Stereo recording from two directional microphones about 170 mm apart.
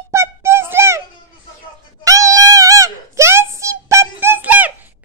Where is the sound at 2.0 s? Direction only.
20° right (ahead or behind).